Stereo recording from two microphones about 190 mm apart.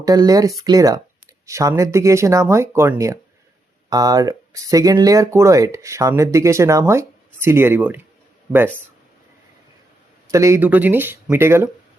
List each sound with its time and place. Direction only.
0.0 s speech: 20° right (ahead or behind)
10.2 s speech: 15° right (ahead or behind)